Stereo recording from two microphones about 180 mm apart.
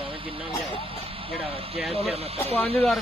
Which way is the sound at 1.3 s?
35° right (ahead or behind).